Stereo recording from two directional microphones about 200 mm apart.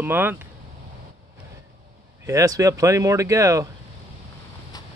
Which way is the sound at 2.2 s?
15° right (ahead or behind).